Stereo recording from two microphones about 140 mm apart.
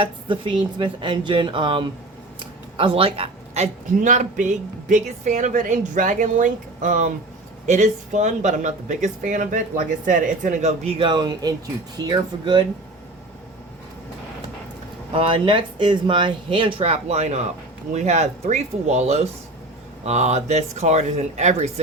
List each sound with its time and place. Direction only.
0.0 s speech: 35° right (ahead or behind); by 7.1 s 65° right (ahead or behind)
7.7 s speech: 55° right (ahead or behind); by 12.6 s 30° right (ahead or behind)
15.1 s speech: 40° right (ahead or behind); by 21.7 s 55° right (ahead or behind)